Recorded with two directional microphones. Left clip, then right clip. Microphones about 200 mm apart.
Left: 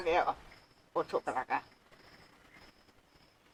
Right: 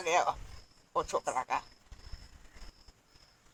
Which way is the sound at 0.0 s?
40° right (ahead or behind).